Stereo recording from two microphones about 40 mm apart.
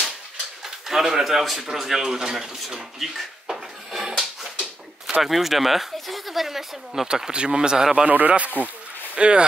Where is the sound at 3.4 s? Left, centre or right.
Centre.